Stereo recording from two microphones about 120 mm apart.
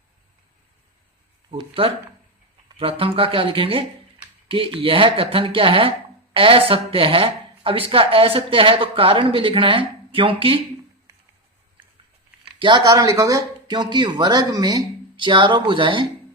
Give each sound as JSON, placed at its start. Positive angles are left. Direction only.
{"t": 1.5, "sound": "speech", "side_deg": -50}
{"t": 12.5, "sound": "speech", "side_deg": -40}